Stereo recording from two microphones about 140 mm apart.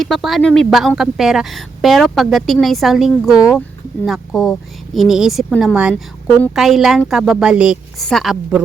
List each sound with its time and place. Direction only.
0.0 s speech: centre (ahead or behind)